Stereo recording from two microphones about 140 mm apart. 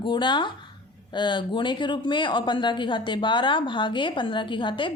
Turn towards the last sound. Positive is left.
turn(degrees=35)  # may be behind; listen again after turning